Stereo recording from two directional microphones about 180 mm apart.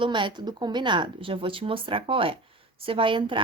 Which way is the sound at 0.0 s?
25° right (ahead or behind).